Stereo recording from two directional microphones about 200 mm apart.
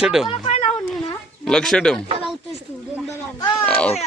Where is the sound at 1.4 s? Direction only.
5° left (ahead or behind).